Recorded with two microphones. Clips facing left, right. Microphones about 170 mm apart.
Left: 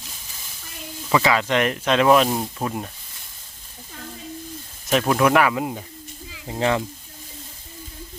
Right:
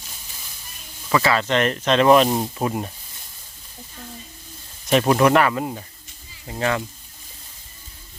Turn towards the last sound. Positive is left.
turn(degrees=20)  # may be behind; listen again after turning